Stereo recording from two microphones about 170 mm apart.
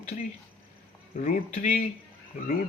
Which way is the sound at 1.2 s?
45° left (ahead or behind).